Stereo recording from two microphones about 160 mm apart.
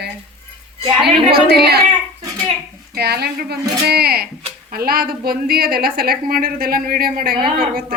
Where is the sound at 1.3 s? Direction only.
80° right.